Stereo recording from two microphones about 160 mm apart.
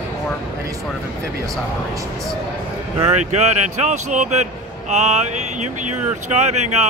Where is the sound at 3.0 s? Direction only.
45° right (ahead or behind).